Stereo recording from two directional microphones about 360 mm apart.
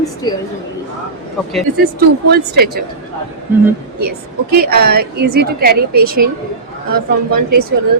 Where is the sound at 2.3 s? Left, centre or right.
Right.